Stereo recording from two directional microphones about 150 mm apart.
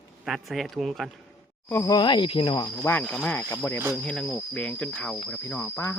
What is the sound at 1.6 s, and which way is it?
Speech, 15° left (ahead or behind).